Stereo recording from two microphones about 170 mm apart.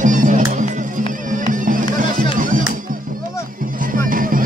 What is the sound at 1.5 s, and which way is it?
Bagpipes, 50° right (ahead or behind).